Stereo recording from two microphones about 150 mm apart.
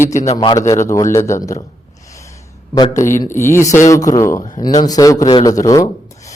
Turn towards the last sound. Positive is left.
turn(degrees=20)  # may be behind; listen again after turning